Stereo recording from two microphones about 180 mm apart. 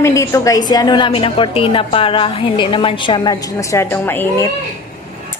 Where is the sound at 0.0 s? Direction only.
15° left (ahead or behind).